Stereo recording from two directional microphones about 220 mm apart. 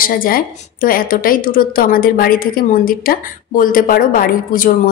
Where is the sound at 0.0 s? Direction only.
40° left (ahead or behind).